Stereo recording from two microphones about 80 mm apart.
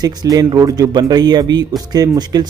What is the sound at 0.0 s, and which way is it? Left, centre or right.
A man's voice, right.